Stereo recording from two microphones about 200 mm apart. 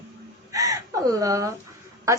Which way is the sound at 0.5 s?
15° right (ahead or behind).